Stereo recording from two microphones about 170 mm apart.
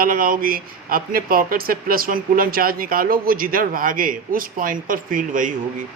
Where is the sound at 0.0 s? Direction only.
55° right (ahead or behind).